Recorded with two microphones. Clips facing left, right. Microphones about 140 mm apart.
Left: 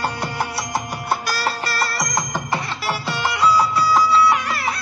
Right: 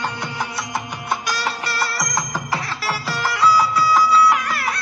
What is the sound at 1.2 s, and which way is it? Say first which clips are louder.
Music: left 1 dB; 5° left (ahead or behind).